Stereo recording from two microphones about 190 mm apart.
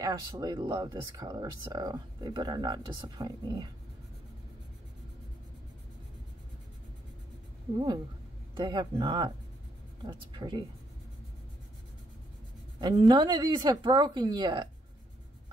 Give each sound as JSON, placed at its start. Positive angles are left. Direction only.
{"t": 0.0, "sound": "speech", "side_deg": -20}
{"t": 8.5, "sound": "speech", "side_deg": -25}
{"t": 12.8, "sound": "speech", "side_deg": -20}